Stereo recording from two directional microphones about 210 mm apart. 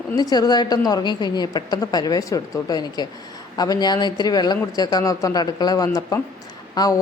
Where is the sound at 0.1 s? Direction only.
20° left (ahead or behind).